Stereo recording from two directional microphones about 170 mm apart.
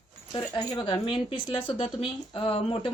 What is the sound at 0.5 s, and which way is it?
Speech, 30° left (ahead or behind).